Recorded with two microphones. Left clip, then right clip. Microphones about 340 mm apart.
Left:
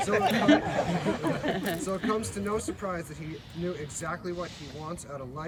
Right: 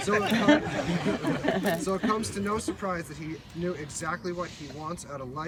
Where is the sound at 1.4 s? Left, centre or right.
Centre.